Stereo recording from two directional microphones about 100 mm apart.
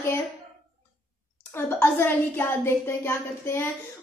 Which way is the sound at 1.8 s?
25° left (ahead or behind).